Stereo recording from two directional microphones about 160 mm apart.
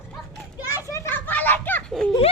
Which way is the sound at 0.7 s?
20° left (ahead or behind).